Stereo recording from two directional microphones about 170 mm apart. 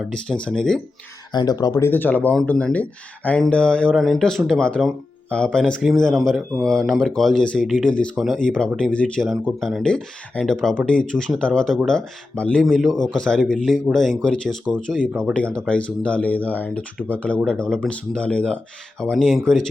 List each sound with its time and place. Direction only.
0.0 s speech: 5° left (ahead or behind)
1.3 s speech: 25° left (ahead or behind)
1.9 s speech: 10° left (ahead or behind)